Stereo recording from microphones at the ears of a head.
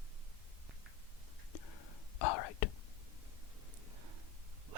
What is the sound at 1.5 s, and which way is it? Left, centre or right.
Whispering, left.